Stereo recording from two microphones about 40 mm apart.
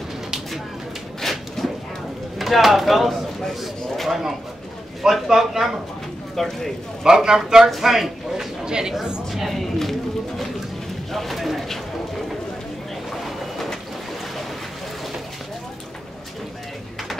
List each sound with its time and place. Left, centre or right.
1.2 s a sound: centre
2.3 s speech: centre
3.9 s a sound: centre
5.0 s speech: centre
6.3 s speech: centre
7.1 s speech: centre
8.6 s speech: centre
9.5 s run: centre
11.1 s pigeon: centre
13.1 s vehicle: centre